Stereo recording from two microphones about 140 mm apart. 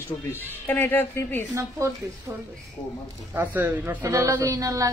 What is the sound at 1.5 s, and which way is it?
Speech, 20° right (ahead or behind).